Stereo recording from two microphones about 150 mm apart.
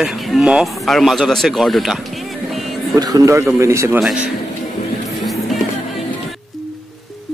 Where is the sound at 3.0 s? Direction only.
25° right (ahead or behind).